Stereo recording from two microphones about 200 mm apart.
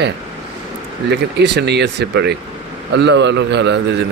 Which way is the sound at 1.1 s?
60° right (ahead or behind).